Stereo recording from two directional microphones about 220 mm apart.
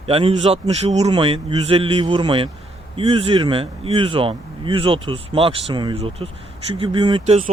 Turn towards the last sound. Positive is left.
turn(degrees=-30)  # may be behind; listen again after turning